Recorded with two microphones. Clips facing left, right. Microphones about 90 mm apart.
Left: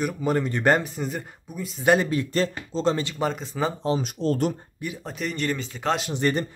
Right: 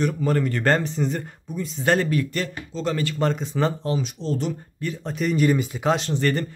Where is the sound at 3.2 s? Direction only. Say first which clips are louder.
Right 5 dB; centre (ahead or behind).